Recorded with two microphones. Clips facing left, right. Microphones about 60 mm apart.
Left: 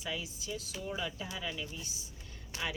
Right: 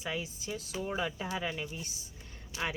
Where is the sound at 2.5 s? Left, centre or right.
Left.